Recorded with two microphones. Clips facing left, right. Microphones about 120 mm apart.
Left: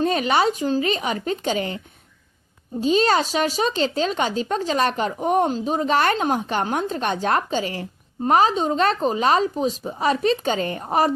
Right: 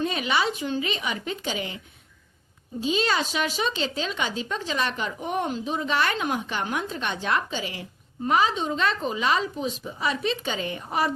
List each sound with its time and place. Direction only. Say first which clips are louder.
0.0 s speech: left 6 dB; 45° left (ahead or behind)
2.8 s speech: left 6 dB; 45° left (ahead or behind)